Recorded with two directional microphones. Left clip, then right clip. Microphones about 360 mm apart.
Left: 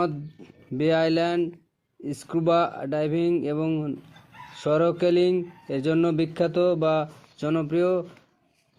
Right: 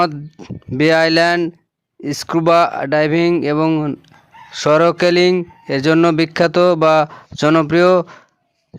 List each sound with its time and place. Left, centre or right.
0.0 s speech: right